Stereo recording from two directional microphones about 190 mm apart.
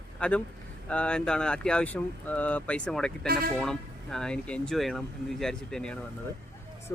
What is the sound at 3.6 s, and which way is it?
Speech, centre (ahead or behind).